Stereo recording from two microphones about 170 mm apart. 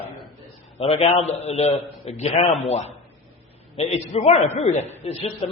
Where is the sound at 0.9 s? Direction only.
40° left (ahead or behind).